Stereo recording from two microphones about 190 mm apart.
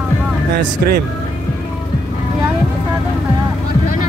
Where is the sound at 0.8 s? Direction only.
55° right (ahead or behind).